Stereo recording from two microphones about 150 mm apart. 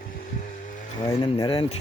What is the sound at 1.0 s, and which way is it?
Speech, 35° left (ahead or behind).